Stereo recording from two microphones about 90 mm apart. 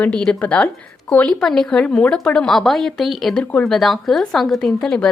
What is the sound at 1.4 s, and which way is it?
A woman's voice, 5° left (ahead or behind).